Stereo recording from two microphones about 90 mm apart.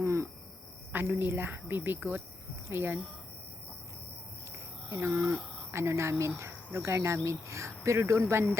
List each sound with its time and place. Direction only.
0.0 s a sound: 35° right (ahead or behind)
0.9 s speech: 20° right (ahead or behind)
4.9 s speech: 30° right (ahead or behind)
6.4 s cricket: 30° right (ahead or behind)
7.3 s speech: 35° right (ahead or behind)